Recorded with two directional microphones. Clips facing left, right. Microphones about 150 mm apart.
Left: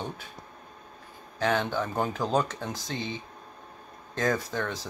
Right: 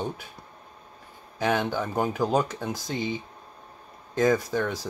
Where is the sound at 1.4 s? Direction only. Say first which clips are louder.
Right 1 dB; 10° right (ahead or behind).